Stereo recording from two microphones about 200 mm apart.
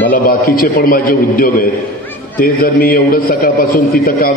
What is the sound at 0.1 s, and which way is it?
A man's voice, 45° left (ahead or behind).